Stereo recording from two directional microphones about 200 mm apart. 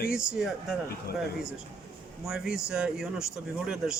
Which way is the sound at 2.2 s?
5° right (ahead or behind).